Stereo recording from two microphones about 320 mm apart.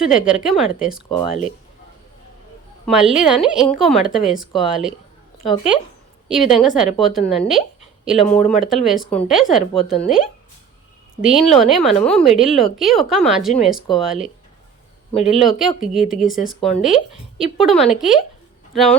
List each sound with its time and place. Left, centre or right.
0.3 s a woman's voice: centre
1.1 s speech: left
2.8 s a woman's voice: centre
11.2 s a woman's voice: centre
15.4 s a woman's voice: centre